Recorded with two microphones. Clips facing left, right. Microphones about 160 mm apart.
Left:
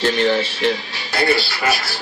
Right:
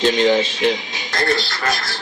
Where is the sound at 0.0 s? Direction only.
15° right (ahead or behind).